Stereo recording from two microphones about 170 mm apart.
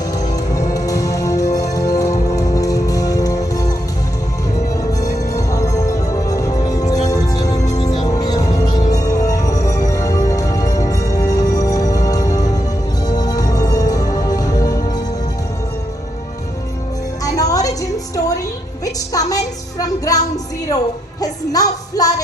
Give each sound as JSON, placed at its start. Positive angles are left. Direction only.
{"t": 0.1, "sound": "music", "side_deg": 20}
{"t": 4.7, "sound": "music", "side_deg": 20}
{"t": 17.2, "sound": "a sound", "side_deg": 20}
{"t": 18.9, "sound": "music", "side_deg": 20}
{"t": 21.2, "sound": "music", "side_deg": 20}